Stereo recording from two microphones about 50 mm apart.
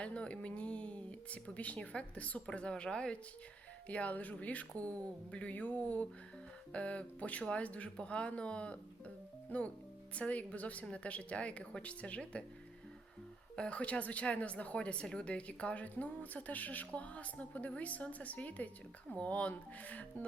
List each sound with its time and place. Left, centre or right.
0.0 s speech: left
3.8 s speech: left
13.6 s speech: left